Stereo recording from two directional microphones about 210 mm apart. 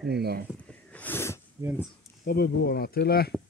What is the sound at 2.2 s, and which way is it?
Speech, 45° left (ahead or behind).